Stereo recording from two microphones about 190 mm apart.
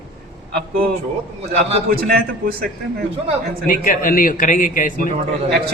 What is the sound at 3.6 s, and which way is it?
A man's voice, 45° left (ahead or behind).